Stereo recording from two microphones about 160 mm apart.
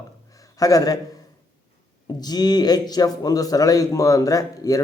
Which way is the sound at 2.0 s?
25° left (ahead or behind).